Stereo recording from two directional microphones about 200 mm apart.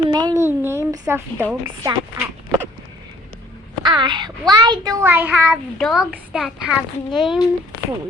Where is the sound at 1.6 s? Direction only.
20° right (ahead or behind).